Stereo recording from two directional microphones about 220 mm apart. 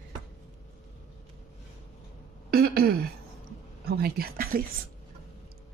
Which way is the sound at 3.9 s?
45° right (ahead or behind).